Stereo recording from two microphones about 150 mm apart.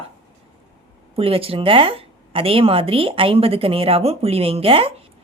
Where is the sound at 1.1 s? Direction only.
40° right (ahead or behind).